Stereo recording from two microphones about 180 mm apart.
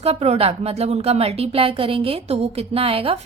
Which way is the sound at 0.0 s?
35° right (ahead or behind).